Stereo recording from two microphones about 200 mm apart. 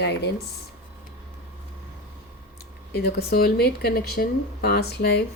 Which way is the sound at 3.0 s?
50° left (ahead or behind).